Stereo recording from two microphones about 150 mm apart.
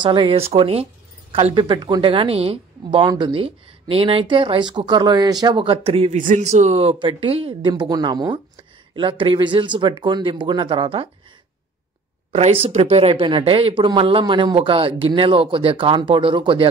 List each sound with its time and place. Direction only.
0.0 s speech: 30° right (ahead or behind)
6.1 s speech: 55° right (ahead or behind); by 11.1 s 35° right (ahead or behind)
12.3 s speech: 45° right (ahead or behind)